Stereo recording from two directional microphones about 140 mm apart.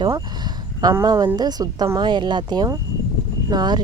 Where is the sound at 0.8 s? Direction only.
25° right (ahead or behind).